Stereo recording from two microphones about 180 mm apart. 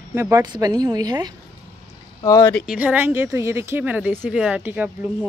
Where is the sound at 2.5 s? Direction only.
5° left (ahead or behind).